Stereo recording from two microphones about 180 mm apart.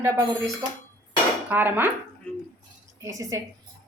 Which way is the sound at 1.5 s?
10° right (ahead or behind).